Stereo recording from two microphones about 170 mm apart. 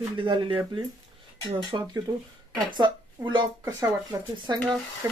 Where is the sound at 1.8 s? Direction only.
20° right (ahead or behind).